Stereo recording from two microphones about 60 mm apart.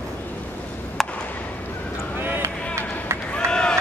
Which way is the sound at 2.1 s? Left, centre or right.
Right.